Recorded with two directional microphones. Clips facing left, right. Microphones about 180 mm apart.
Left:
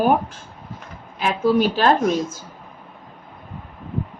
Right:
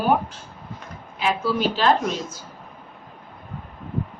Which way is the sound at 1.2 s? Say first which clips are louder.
Left 4 dB; 50° left (ahead or behind).